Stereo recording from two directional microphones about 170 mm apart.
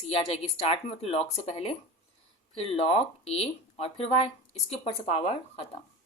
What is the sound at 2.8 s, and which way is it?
A woman's voice, 35° left (ahead or behind).